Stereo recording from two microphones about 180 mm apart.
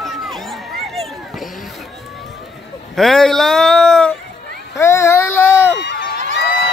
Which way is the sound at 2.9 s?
Centre (ahead or behind).